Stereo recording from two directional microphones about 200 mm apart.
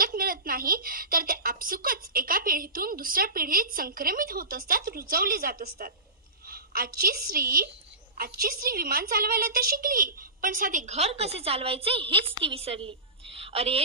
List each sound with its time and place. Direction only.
0.0 s a woman's voice: 45° right (ahead or behind); by 13.8 s 30° right (ahead or behind)